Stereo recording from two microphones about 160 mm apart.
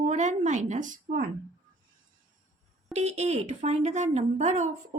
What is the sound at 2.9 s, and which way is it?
Speech, 45° right (ahead or behind).